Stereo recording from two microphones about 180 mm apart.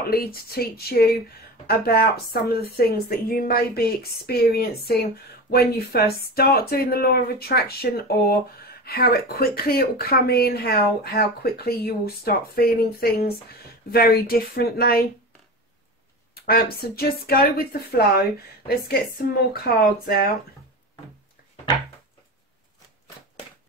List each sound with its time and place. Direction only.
0.1 s speech: 55° left (ahead or behind)
16.3 s speech: 60° left (ahead or behind)
19.5 s speech: 55° left (ahead or behind)